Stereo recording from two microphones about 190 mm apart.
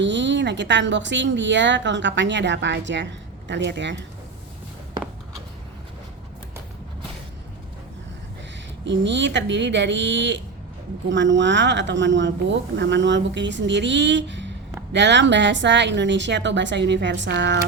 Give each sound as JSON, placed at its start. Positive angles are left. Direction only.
{"t": 0.0, "sound": "speech", "side_deg": -70}
{"t": 8.9, "sound": "speech", "side_deg": -70}